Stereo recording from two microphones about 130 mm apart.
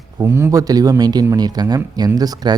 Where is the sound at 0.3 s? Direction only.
20° right (ahead or behind).